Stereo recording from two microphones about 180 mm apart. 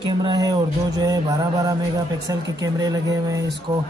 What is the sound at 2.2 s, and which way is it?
Speech, 20° right (ahead or behind).